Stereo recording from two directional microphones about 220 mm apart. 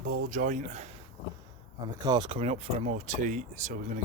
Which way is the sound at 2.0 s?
20° right (ahead or behind).